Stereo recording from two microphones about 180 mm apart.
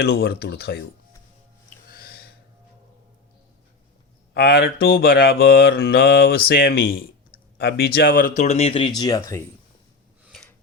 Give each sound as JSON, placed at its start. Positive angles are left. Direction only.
{"t": 0.0, "sound": "mantra", "side_deg": 60}
{"t": 1.9, "sound": "gasp", "side_deg": 55}
{"t": 4.4, "sound": "mantra", "side_deg": 65}
{"t": 8.4, "sound": "speech", "side_deg": 35}
{"t": 9.0, "sound": "speech", "side_deg": 20}
{"t": 10.2, "sound": "a sound", "side_deg": 0}